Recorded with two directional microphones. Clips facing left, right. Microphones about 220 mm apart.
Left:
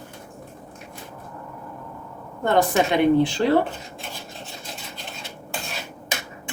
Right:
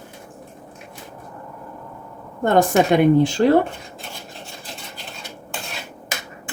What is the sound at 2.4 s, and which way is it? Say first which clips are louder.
Speech: right 4 dB; 45° right (ahead or behind).